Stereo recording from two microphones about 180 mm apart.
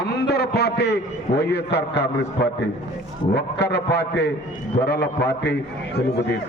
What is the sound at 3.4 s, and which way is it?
A man's voice, 65° left (ahead or behind).